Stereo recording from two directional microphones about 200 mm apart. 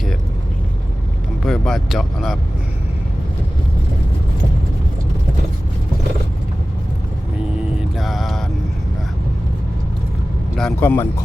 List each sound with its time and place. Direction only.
1.5 s speech: centre (ahead or behind)
7.8 s music: centre (ahead or behind)
10.6 s speech: 5° left (ahead or behind)